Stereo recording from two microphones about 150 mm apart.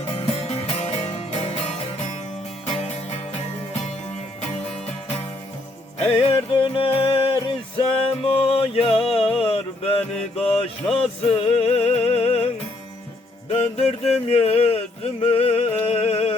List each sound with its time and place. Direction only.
0.1 s music: 40° left (ahead or behind)
6.1 s music: 35° left (ahead or behind)
9.4 s a sound: 40° left (ahead or behind)
13.5 s music: 45° left (ahead or behind)
14.1 s a sound: 40° left (ahead or behind)
15.2 s music: 40° left (ahead or behind)